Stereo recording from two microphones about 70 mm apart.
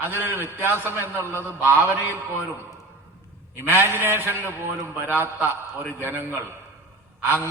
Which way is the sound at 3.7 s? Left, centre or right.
Right.